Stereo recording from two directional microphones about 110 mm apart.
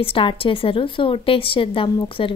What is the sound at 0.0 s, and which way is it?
A woman's voice, 55° left (ahead or behind).